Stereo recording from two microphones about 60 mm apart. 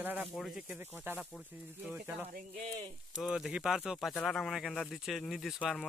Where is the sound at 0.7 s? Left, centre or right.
Right.